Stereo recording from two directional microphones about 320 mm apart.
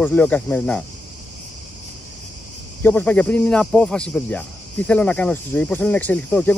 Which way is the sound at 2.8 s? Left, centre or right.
Centre.